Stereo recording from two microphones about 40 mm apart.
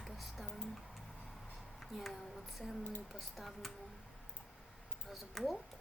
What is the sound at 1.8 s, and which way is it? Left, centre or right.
Speech, centre.